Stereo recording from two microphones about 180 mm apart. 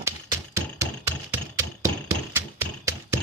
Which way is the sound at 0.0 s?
15° right (ahead or behind).